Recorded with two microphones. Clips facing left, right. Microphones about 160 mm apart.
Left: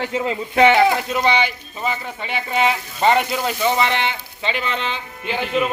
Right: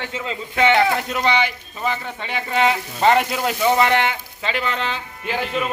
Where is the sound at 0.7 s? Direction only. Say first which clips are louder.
Left 2 dB; centre (ahead or behind).